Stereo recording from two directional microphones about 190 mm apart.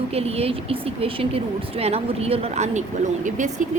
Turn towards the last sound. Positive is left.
turn(degrees=-40)  # may be behind; listen again after turning